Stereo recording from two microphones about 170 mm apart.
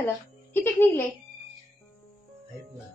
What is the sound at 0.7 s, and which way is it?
Speech, 15° left (ahead or behind).